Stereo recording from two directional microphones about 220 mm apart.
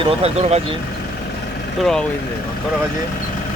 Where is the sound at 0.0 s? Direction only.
30° right (ahead or behind).